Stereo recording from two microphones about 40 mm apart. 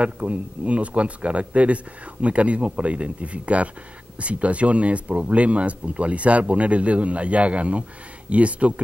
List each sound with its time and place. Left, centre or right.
0.0 s speech: right